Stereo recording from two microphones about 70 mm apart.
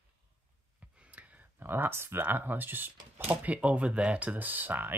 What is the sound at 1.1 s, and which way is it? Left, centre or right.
Speech, right.